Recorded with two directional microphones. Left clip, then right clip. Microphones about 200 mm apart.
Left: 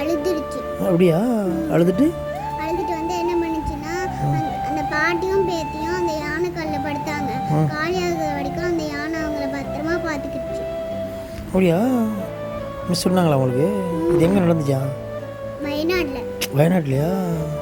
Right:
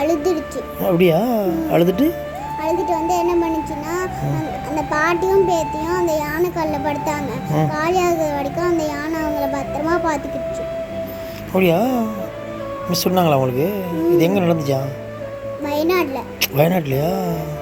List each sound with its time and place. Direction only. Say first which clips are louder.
0.0 s music: right 3 dB; 10° left (ahead or behind)
0.8 s speech: right 3 dB; 25° left (ahead or behind)
2.6 s a sound: right 7 dB; 10° left (ahead or behind)
5.2 s a sound: right 5 dB; 10° left (ahead or behind)
6.6 s a child's voice: right 4 dB; 10° left (ahead or behind)
9.4 s children playing: right 4 dB; 10° left (ahead or behind)
11.5 s speech: right 2 dB; 25° left (ahead or behind)
15.6 s music: right 4 dB; 10° left (ahead or behind)
16.4 s speech: right 3 dB; 25° left (ahead or behind)